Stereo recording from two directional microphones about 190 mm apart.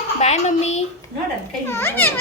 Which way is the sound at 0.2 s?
35° left (ahead or behind).